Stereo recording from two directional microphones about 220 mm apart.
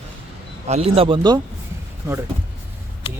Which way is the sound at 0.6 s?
25° right (ahead or behind).